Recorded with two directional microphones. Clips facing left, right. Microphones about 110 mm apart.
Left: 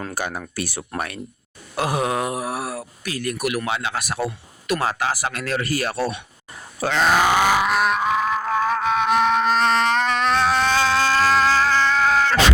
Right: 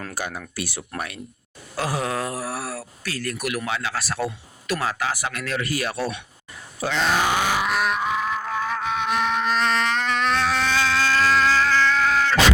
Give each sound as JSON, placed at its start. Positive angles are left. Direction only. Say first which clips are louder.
{"t": 0.1, "sound": "speech", "louder": "left 3 dB", "side_deg": 55}
{"t": 1.7, "sound": "a sound", "louder": "left 3 dB", "side_deg": 20}
{"t": 3.7, "sound": "speech", "louder": "left 2 dB", "side_deg": 20}
{"t": 4.8, "sound": "speech", "louder": "left 2 dB", "side_deg": 30}
{"t": 6.8, "sound": "grunt", "louder": "left 4 dB", "side_deg": 55}